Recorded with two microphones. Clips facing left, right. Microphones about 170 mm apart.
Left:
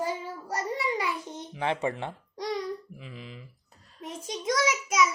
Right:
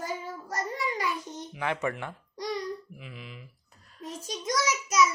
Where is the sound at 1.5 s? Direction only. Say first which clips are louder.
Left 2 dB; 30° left (ahead or behind).